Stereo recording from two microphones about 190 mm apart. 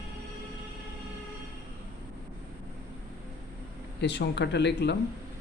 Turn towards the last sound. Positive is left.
turn(degrees=65)  # may be behind; listen again after turning